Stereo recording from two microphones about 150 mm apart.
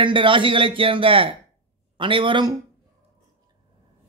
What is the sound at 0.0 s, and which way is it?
A man's voice, 35° right (ahead or behind).